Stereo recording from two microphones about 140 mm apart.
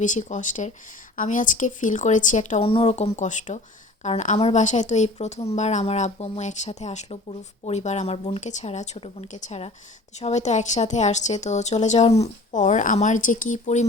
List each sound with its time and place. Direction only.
0.0 s a woman's voice: 60° left (ahead or behind)
2.6 s a woman's voice: 45° left (ahead or behind); by 13.8 s 60° left (ahead or behind)